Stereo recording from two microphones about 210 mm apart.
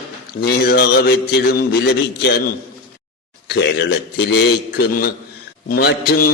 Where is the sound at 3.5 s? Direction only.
55° left (ahead or behind).